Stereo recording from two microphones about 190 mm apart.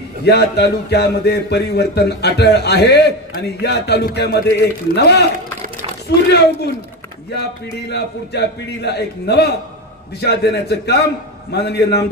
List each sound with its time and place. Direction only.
0.2 s a man's voice: 60° left (ahead or behind)
6.2 s a man's voice: 60° left (ahead or behind)